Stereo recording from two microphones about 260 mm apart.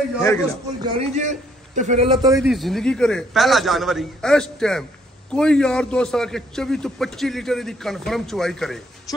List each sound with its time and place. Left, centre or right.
0.8 s a man's voice: right
2.4 s a man's voice: centre